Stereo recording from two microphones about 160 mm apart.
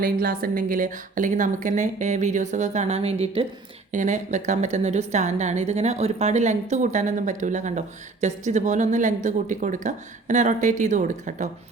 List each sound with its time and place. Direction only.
0.0 s a woman's voice: 65° right (ahead or behind); by 3.4 s 40° right (ahead or behind)
3.9 s a woman's voice: 50° right (ahead or behind)